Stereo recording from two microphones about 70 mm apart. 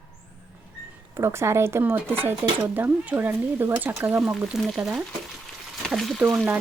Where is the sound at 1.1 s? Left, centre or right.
Right.